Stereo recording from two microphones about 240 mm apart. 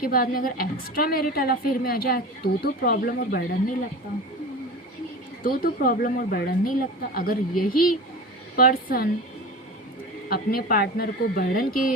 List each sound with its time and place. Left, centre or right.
0.0 s a woman's voice: left
5.4 s a woman's voice: left
10.2 s a woman's voice: left